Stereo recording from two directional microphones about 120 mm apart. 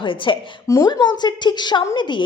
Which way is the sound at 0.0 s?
45° left (ahead or behind).